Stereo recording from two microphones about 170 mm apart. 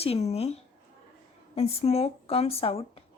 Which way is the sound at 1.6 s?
35° left (ahead or behind).